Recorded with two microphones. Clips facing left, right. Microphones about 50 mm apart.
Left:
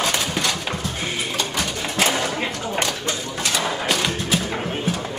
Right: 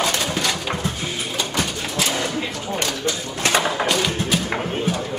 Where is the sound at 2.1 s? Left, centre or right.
Left.